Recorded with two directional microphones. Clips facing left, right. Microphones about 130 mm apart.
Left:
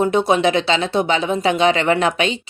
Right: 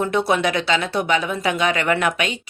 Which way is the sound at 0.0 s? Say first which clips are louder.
Left 4 dB; 20° left (ahead or behind).